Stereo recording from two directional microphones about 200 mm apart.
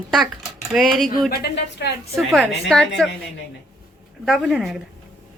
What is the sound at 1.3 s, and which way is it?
Speech, 55° left (ahead or behind).